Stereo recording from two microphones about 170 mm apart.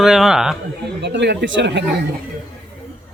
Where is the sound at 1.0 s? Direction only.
90° right.